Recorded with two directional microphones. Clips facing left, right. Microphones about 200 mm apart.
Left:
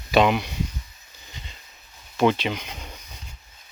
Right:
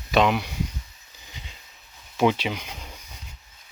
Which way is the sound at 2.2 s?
10° right (ahead or behind).